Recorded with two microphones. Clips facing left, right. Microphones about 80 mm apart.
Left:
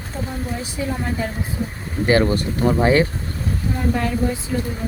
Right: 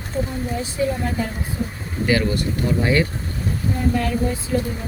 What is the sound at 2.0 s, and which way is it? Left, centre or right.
Speech, left.